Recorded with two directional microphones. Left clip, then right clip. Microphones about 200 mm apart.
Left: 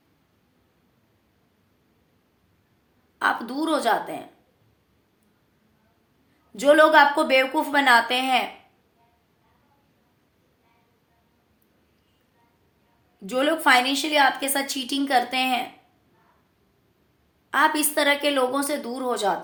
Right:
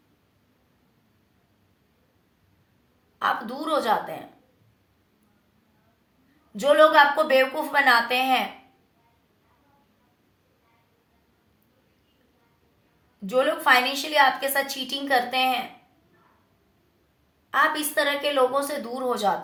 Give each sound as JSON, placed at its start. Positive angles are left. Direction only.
{"t": 3.2, "sound": "a woman's voice", "side_deg": 45}
{"t": 6.6, "sound": "a woman's voice", "side_deg": 40}
{"t": 13.2, "sound": "a woman's voice", "side_deg": 40}
{"t": 17.5, "sound": "a woman's voice", "side_deg": 45}